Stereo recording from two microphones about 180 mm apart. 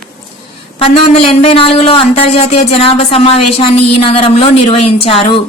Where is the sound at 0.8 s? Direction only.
30° left (ahead or behind).